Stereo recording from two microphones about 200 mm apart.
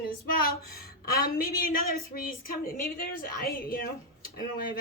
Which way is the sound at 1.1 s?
45° left (ahead or behind).